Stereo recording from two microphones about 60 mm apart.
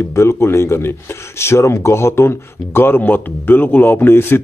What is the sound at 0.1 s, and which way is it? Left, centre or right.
Speech, left.